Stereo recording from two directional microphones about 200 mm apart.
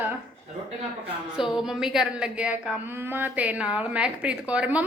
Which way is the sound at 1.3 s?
5° right (ahead or behind).